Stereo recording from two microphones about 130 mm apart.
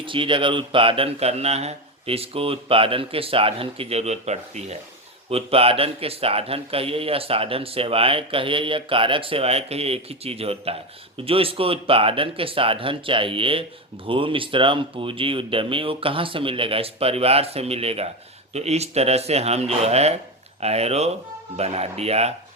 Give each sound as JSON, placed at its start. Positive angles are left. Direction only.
{"t": 0.0, "sound": "speech", "side_deg": -40}
{"t": 5.3, "sound": "speech", "side_deg": -50}